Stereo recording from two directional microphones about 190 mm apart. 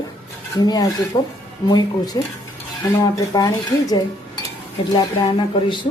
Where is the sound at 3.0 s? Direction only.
20° left (ahead or behind).